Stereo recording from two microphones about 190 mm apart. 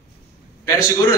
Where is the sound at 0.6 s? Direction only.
15° left (ahead or behind).